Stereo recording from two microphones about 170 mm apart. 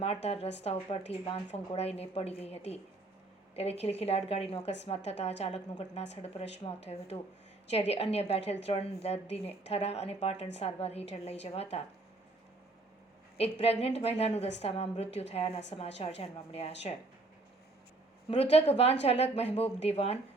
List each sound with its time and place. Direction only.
0.0 s a woman's voice: 35° left (ahead or behind)
13.3 s a woman's voice: 35° left (ahead or behind)
18.5 s a woman's voice: 35° left (ahead or behind)